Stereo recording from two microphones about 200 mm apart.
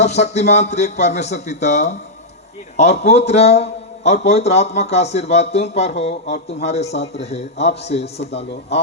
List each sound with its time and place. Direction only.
0.0 s a man's voice: 35° left (ahead or behind)